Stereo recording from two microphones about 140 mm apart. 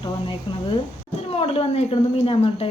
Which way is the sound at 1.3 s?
45° left (ahead or behind).